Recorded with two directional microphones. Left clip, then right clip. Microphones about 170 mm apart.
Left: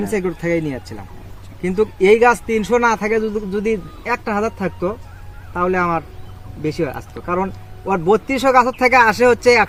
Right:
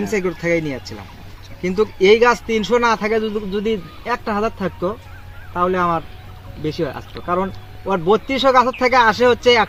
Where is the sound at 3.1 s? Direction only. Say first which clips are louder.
Left 1 dB; 15° left (ahead or behind).